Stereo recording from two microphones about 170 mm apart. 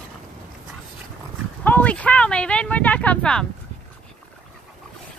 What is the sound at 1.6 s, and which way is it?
Speech, 10° left (ahead or behind).